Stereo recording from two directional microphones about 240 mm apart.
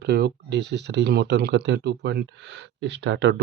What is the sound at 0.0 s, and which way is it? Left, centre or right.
Speech, right.